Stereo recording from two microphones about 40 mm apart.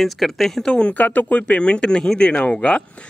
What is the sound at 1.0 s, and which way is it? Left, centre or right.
A man's voice, left.